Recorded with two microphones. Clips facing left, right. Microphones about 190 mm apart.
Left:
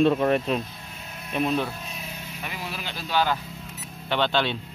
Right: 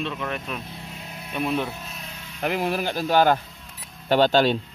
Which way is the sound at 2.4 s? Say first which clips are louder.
Right 12 dB; 55° right (ahead or behind).